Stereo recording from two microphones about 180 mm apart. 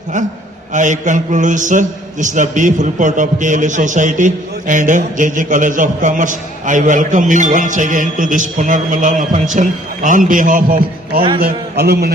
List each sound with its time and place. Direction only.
0.7 s a man's voice: 45° right (ahead or behind); by 12.1 s 60° right (ahead or behind)